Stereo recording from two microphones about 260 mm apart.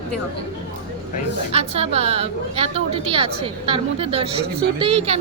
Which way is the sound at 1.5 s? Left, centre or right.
Right.